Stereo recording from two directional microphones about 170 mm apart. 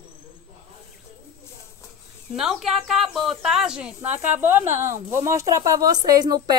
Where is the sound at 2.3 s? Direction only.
Centre (ahead or behind).